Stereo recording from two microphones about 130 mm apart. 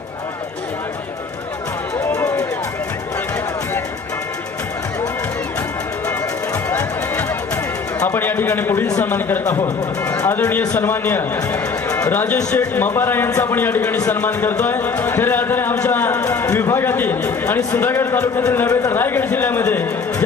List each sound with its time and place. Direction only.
2.1 s run: 25° left (ahead or behind)
6.7 s music: 20° left (ahead or behind)
8.0 s a man's voice: 15° left (ahead or behind)